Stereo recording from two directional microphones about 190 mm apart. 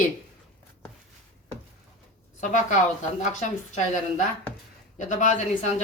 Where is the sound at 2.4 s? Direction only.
40° left (ahead or behind).